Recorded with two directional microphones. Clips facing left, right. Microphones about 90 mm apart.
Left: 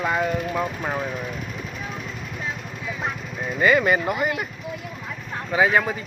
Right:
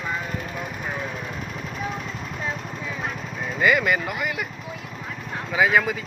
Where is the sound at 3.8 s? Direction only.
30° left (ahead or behind).